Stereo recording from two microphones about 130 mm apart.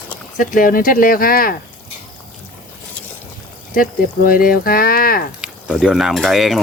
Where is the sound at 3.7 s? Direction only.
90° left.